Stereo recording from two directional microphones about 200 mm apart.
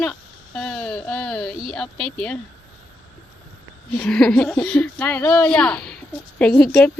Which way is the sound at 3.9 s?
5° left (ahead or behind).